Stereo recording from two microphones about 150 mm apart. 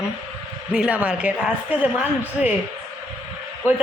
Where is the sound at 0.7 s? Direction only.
5° right (ahead or behind).